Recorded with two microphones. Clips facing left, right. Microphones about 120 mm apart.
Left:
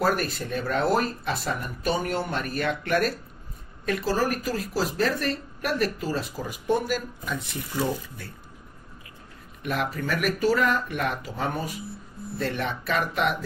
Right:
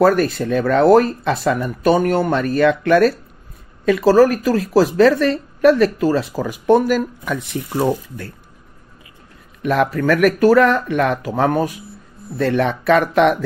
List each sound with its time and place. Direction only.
0.0 s a woman's voice: 90° right
7.7 s speech: 65° right (ahead or behind)
9.6 s a woman's voice: 90° right; by 11.7 s 70° right (ahead or behind)
12.4 s a woman's voice: 90° right